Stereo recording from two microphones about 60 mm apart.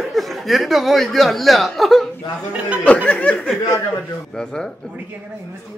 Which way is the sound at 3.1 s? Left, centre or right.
Left.